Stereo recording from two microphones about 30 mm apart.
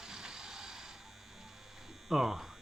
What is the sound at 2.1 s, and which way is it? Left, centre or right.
Speech, centre.